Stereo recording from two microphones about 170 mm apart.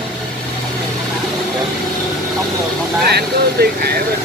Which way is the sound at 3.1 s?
65° right (ahead or behind).